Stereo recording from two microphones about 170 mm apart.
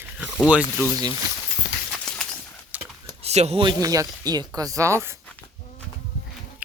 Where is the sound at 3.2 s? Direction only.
40° right (ahead or behind); by 5.2 s 15° right (ahead or behind).